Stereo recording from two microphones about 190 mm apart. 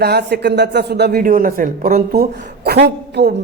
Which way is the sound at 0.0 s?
60° right (ahead or behind).